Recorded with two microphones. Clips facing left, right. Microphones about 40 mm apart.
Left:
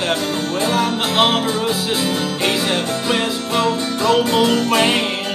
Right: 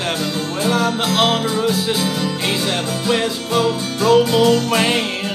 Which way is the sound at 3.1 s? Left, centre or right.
Centre.